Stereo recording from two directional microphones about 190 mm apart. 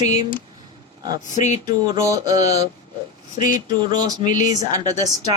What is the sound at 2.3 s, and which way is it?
Speech, 35° left (ahead or behind).